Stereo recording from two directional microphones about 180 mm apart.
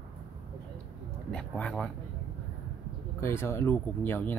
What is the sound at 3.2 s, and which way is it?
Speech, 15° left (ahead or behind).